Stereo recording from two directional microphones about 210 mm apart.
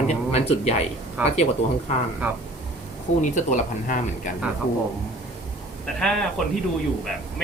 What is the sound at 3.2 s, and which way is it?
Speech, 35° left (ahead or behind).